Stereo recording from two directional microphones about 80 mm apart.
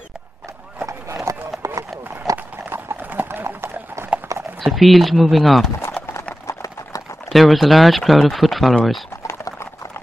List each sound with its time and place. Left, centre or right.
1.3 s run: right
2.3 s clip-clop: right
4.6 s speech: centre
6.4 s clip-clop: left
7.2 s speech: centre
9.3 s clip-clop: left